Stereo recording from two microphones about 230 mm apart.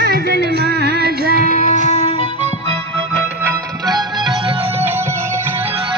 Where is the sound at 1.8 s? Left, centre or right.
Left.